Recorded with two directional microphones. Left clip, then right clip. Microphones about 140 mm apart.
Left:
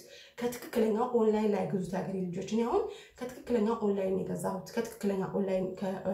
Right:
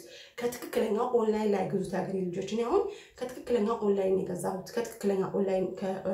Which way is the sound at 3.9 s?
15° right (ahead or behind).